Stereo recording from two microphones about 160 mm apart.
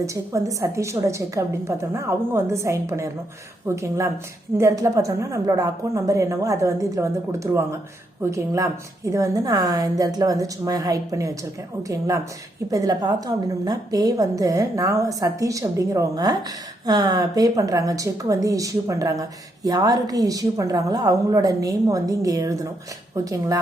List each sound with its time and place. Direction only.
0.0 s a woman's voice: 20° right (ahead or behind)